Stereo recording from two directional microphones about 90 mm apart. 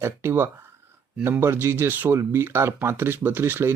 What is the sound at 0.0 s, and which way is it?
Speech, 25° right (ahead or behind).